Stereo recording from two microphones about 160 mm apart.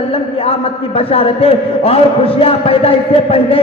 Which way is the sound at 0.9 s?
35° left (ahead or behind).